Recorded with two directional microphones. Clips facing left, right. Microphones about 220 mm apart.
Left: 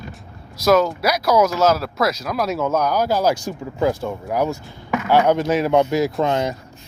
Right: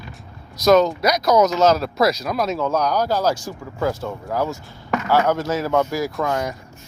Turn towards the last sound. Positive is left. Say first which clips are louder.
# left 3 dB
turn(degrees=25)  # may be behind; listen again after turning